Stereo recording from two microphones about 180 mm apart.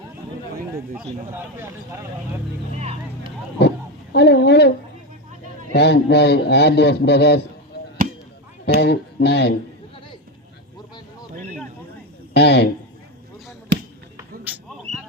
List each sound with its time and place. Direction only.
0.9 s speech: 15° right (ahead or behind)
3.6 s a man's voice: 65° left (ahead or behind)
5.7 s a man's voice: 65° left (ahead or behind)
8.8 s a man's voice: 65° left (ahead or behind)
12.3 s a man's voice: 65° left (ahead or behind)
13.7 s basketball bounce: 70° right (ahead or behind)
14.5 s a sound: 10° right (ahead or behind)